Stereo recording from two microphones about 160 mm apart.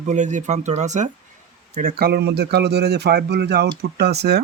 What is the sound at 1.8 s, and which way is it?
A man's voice, 65° right (ahead or behind).